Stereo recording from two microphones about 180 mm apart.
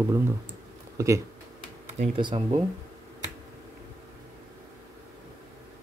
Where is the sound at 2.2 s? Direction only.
25° right (ahead or behind).